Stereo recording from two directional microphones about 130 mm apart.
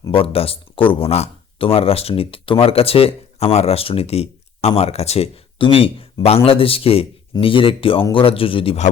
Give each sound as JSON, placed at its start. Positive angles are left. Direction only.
{"t": 0.1, "sound": "speech", "side_deg": 45}